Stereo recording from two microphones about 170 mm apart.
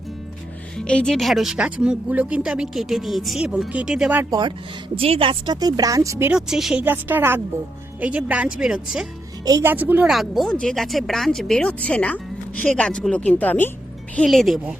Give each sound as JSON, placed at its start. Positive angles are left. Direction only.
{"t": 0.8, "sound": "speech", "side_deg": 5}
{"t": 4.3, "sound": "speech", "side_deg": -25}
{"t": 9.4, "sound": "speech", "side_deg": -20}
{"t": 9.7, "sound": "speech", "side_deg": -10}